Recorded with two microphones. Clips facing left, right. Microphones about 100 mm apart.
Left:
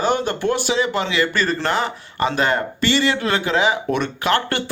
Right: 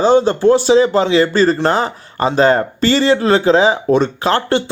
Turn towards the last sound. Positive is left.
turn(degrees=-30)  # may be behind; listen again after turning